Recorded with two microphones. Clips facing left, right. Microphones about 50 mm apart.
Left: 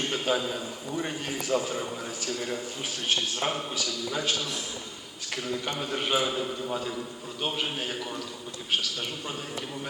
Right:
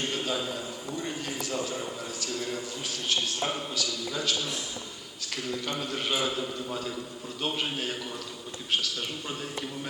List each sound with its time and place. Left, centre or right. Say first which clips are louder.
0.1 s a sound: left 3 dB; left
1.0 s a man's voice: left 2 dB; left
3.4 s a man's voice: left 1 dB; left
5.8 s a man's voice: left 3 dB; centre